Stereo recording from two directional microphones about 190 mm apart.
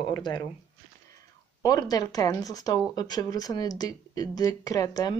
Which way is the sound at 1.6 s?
20° left (ahead or behind).